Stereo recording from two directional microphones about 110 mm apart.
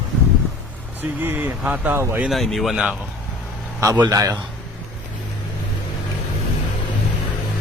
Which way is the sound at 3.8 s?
30° right (ahead or behind).